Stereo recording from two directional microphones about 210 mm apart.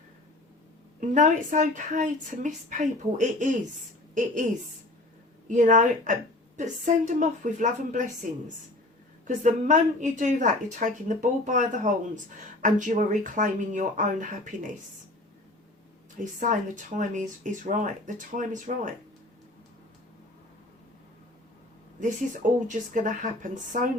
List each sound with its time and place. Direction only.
1.0 s a woman's voice: 35° right (ahead or behind)
5.5 s a woman's voice: 35° right (ahead or behind)
16.1 s a woman's voice: 35° right (ahead or behind)
22.6 s a woman's voice: 35° right (ahead or behind)